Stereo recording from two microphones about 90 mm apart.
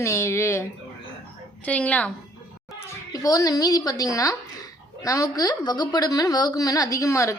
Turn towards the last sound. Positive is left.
turn(degrees=35)  # may be behind; listen again after turning